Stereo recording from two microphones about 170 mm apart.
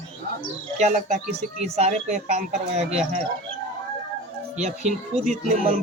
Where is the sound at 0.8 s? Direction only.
45° right (ahead or behind).